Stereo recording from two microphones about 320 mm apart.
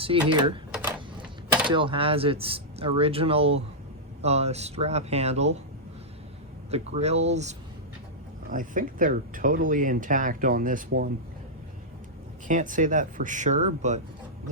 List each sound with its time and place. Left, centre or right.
0.2 s speech: centre
0.7 s a sound: centre
1.7 s speech: centre
6.7 s speech: centre
12.5 s speech: right